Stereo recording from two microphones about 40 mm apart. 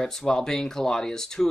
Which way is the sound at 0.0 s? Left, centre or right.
Centre.